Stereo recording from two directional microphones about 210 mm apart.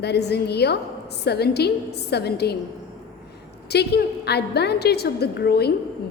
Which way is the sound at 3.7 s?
50° left (ahead or behind).